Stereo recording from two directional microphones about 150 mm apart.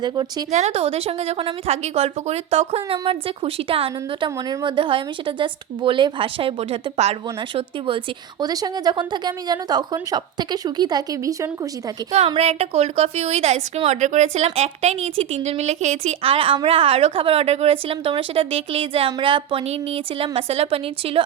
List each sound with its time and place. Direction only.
0.0 s a woman's voice: 30° right (ahead or behind)
0.5 s a woman's voice: 45° right (ahead or behind)
7.5 s a woman's voice: 35° right (ahead or behind)
12.3 s a woman's voice: 45° right (ahead or behind)